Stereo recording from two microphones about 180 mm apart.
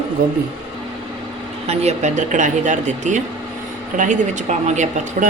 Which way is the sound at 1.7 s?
40° right (ahead or behind).